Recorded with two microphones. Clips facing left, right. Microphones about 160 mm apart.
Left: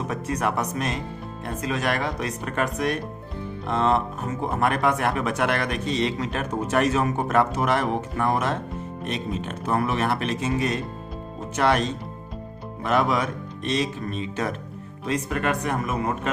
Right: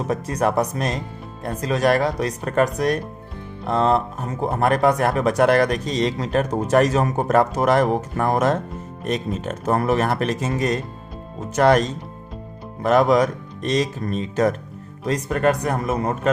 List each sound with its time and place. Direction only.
0.1 s speech: 35° right (ahead or behind)